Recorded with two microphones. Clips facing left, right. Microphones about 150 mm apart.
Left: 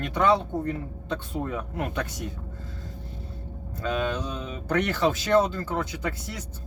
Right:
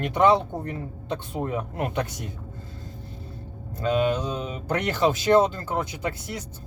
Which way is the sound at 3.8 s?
15° right (ahead or behind).